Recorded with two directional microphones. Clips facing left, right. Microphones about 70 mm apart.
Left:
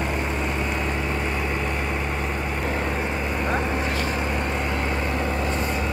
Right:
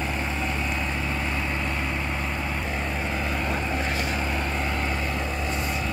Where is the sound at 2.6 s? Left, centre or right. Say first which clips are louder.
Left 4 dB; left.